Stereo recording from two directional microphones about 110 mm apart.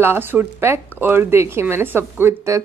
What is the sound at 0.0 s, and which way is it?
Speech, 20° right (ahead or behind).